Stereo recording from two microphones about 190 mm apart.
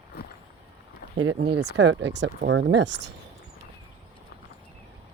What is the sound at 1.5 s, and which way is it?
Speech, 60° right (ahead or behind).